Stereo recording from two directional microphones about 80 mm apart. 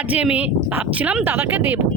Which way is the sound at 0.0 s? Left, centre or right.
Centre.